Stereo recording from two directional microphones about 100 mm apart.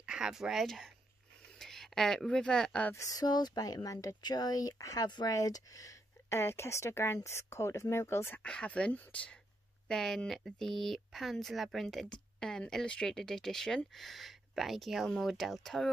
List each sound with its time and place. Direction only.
0.0 s speech: 10° right (ahead or behind); by 2.9 s 10° left (ahead or behind)
2.9 s speech: 35° left (ahead or behind)
8.4 s speech: 10° left (ahead or behind)